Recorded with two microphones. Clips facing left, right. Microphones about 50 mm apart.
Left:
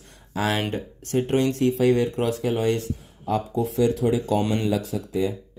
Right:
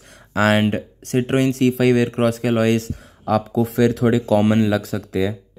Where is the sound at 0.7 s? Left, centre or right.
Right.